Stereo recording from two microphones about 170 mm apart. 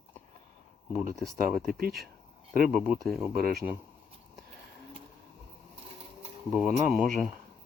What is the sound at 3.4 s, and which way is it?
Speech, 60° right (ahead or behind).